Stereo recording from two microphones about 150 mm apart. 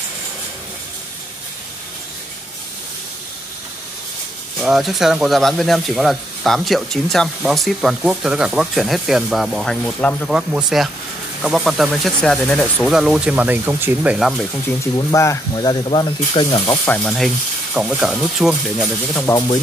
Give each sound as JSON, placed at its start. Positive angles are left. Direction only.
{"t": 4.6, "sound": "speech", "side_deg": 0}
{"t": 10.3, "sound": "speech", "side_deg": -5}
{"t": 12.9, "sound": "speech", "side_deg": -5}
{"t": 14.1, "sound": "speech", "side_deg": 0}
{"t": 15.0, "sound": "speech", "side_deg": 20}
{"t": 16.8, "sound": "speech", "side_deg": 5}
{"t": 19.3, "sound": "speech", "side_deg": 30}